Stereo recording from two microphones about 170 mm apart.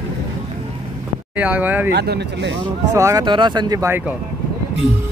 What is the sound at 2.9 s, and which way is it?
Speech, 20° right (ahead or behind).